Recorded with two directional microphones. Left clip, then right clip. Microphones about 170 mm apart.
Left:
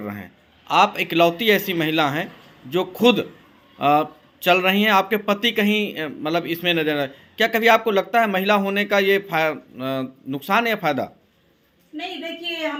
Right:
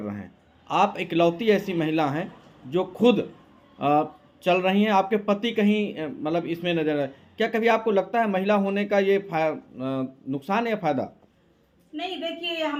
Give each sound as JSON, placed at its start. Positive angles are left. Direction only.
{"t": 0.0, "sound": "speech", "side_deg": 0}